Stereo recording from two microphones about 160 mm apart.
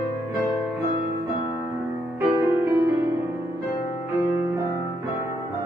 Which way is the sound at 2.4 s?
15° right (ahead or behind).